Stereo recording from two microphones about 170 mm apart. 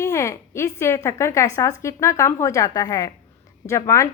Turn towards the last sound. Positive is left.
turn(degrees=15)  # may be behind; listen again after turning